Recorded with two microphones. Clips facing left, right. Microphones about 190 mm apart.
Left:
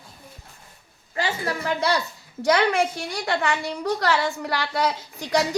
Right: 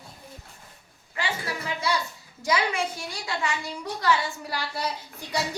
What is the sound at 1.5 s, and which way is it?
A woman's voice, 70° left (ahead or behind).